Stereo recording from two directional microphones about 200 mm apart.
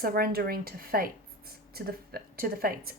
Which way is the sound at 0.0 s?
50° right (ahead or behind).